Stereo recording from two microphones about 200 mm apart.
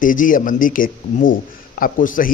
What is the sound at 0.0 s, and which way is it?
A man's voice, 40° left (ahead or behind).